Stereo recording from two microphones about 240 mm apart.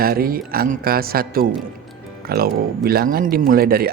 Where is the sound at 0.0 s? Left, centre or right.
Right.